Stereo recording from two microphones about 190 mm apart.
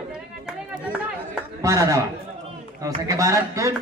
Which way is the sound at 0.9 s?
5° right (ahead or behind).